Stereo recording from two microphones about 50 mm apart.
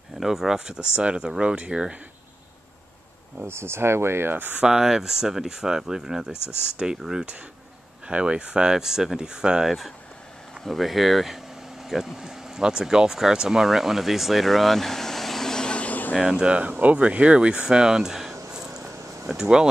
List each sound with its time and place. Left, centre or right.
0.2 s speech: centre
0.9 s speech: right
3.3 s speech: right
4.6 s speech: centre
6.3 s speech: left
6.8 s speech: centre
10.6 s speech: centre; by 16.2 s left
16.2 s speech: centre
16.4 s speech: right; by 18.3 s centre
18.5 s a sound: centre
18.8 s a sound: right
19.2 s speech: centre